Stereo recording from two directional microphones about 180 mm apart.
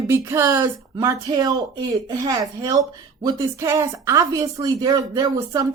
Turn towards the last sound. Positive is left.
turn(degrees=-20)  # may be behind; listen again after turning